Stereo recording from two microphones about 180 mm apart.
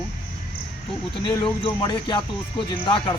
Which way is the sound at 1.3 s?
20° left (ahead or behind).